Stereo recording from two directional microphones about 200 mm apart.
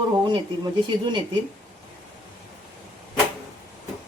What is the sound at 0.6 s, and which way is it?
Speech, 20° right (ahead or behind).